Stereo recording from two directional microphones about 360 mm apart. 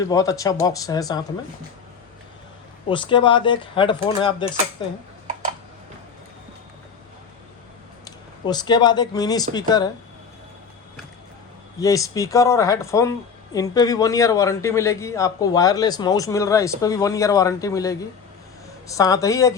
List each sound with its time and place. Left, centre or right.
0.0 s speech: centre
2.9 s speech: centre
5.3 s typing: right
8.4 s speech: centre
11.8 s speech: centre
18.9 s speech: centre